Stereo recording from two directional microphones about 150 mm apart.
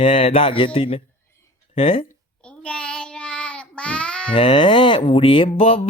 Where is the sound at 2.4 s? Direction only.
5° left (ahead or behind).